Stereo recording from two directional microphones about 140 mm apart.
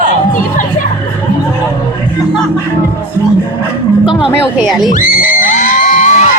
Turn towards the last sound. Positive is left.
turn(degrees=65)  # may be behind; listen again after turning